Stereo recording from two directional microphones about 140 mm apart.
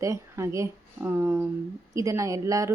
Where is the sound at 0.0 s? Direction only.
20° right (ahead or behind).